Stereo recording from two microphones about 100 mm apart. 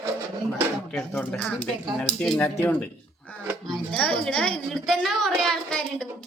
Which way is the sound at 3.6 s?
5° left (ahead or behind).